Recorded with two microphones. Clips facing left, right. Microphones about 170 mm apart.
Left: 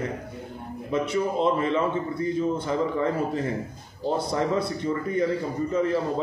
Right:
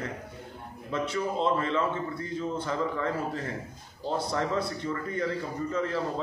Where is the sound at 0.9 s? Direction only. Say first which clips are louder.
Left 5 dB; 15° left (ahead or behind).